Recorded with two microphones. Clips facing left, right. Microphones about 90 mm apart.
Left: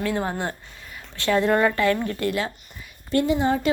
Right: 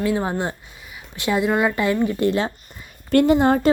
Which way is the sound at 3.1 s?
60° right (ahead or behind).